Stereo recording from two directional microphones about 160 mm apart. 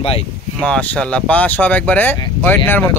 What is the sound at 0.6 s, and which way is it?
Speech, 5° left (ahead or behind).